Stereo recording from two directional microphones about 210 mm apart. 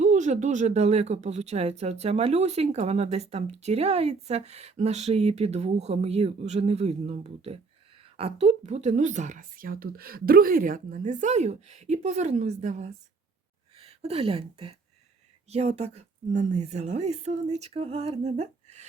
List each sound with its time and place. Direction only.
0.0 s speech: 35° right (ahead or behind)